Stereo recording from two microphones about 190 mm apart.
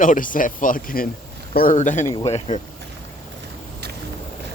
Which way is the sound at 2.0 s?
15° left (ahead or behind).